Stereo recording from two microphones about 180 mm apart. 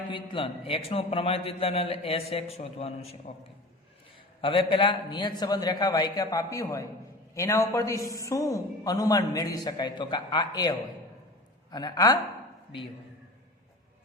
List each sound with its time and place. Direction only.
0.1 s a man's voice: 30° left (ahead or behind)
4.4 s a man's voice: 30° left (ahead or behind)